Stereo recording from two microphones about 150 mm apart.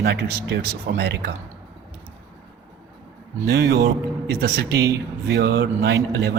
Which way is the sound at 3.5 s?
90° right.